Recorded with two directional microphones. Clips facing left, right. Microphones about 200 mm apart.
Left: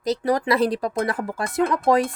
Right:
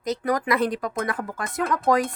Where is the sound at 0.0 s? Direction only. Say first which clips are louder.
Left 3 dB; 30° left (ahead or behind).